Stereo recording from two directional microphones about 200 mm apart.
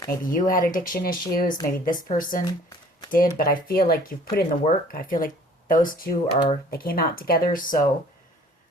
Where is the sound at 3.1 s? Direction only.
45° left (ahead or behind).